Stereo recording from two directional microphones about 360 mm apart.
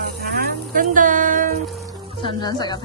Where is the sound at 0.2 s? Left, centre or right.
Right.